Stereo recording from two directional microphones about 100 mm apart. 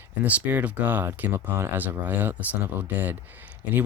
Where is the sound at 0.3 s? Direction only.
15° right (ahead or behind).